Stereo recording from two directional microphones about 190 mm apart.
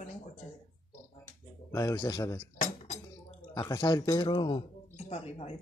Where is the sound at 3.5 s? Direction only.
20° left (ahead or behind).